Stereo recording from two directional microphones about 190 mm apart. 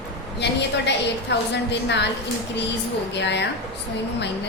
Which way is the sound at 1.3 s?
65° left (ahead or behind).